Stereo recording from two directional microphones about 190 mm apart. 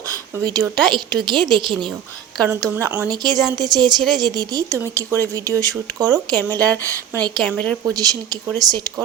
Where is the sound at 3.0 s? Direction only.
20° right (ahead or behind).